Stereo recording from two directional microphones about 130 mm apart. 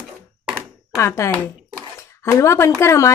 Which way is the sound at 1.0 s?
20° left (ahead or behind).